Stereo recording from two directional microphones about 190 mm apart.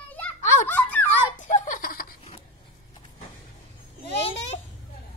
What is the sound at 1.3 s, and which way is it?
Giggle, 40° left (ahead or behind).